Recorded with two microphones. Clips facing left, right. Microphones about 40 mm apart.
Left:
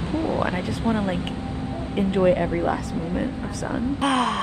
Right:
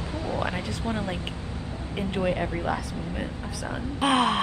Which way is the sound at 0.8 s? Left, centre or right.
Left.